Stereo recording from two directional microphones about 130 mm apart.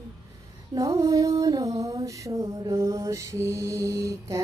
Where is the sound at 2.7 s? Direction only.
25° right (ahead or behind).